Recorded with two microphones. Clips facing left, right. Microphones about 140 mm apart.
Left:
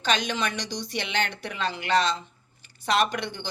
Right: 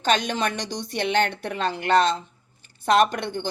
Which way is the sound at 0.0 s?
50° right (ahead or behind).